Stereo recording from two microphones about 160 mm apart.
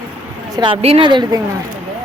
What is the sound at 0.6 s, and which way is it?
Speech, 35° right (ahead or behind).